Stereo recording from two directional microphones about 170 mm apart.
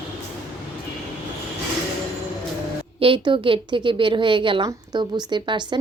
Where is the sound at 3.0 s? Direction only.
30° right (ahead or behind).